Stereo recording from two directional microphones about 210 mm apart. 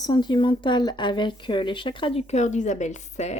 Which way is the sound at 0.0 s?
20° left (ahead or behind).